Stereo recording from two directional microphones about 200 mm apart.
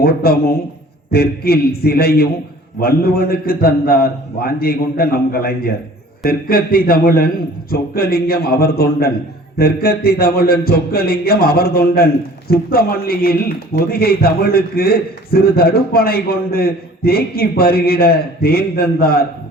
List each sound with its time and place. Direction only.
0.0 s a man's voice: 50° left (ahead or behind)